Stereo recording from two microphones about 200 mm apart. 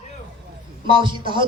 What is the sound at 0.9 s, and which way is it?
Speech, 25° right (ahead or behind).